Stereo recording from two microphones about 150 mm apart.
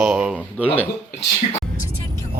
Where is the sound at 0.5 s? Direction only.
10° left (ahead or behind).